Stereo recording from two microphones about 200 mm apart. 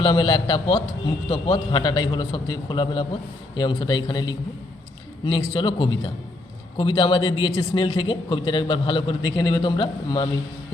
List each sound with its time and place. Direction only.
0.0 s speech: 25° left (ahead or behind)